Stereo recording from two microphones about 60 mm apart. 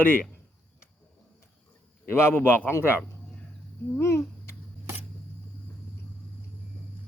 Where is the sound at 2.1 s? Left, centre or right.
Left.